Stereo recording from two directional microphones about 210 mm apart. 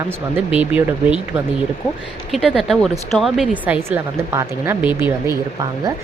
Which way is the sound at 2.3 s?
Centre (ahead or behind).